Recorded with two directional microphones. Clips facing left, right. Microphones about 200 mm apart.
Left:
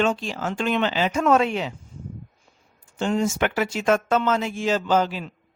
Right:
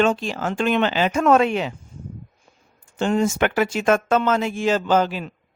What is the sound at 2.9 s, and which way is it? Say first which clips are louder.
Speech: right 3 dB; 60° right (ahead or behind).